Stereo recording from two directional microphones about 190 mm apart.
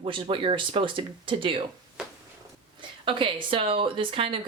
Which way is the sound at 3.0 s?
25° right (ahead or behind).